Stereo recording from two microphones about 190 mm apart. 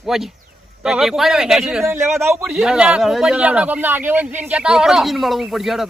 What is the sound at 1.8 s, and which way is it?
Speech, 15° right (ahead or behind).